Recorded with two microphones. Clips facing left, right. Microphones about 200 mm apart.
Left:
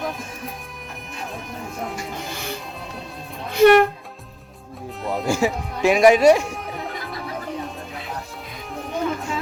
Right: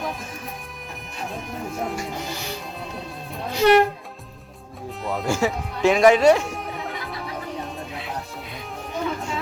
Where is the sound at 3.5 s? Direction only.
55° left (ahead or behind).